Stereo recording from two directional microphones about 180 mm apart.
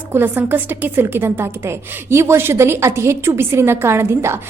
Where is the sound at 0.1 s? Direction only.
10° right (ahead or behind).